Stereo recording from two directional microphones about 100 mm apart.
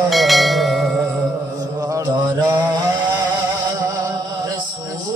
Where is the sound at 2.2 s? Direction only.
40° right (ahead or behind).